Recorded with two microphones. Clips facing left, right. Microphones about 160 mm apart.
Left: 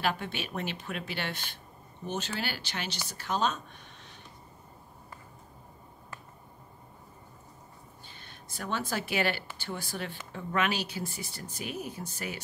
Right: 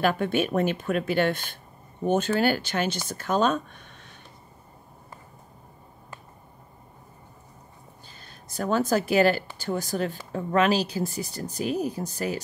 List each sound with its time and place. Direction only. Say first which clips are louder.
0.0 s speech: right 9 dB; 50° right (ahead or behind)
8.2 s speech: right 10 dB; 40° right (ahead or behind)